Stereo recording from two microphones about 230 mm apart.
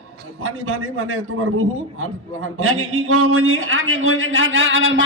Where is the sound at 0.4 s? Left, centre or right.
Right.